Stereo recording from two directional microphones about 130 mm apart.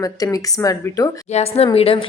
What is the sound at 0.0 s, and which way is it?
A woman's voice, 25° left (ahead or behind).